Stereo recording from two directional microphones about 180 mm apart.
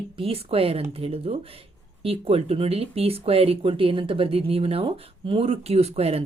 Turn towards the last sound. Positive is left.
turn(degrees=-35)  # may be behind; listen again after turning